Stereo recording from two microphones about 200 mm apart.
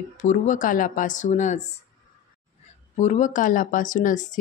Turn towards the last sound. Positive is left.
turn(degrees=40)  # may be behind; listen again after turning